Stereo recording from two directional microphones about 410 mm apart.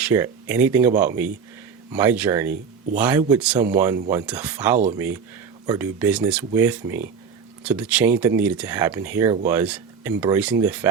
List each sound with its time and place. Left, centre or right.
0.0 s speech: centre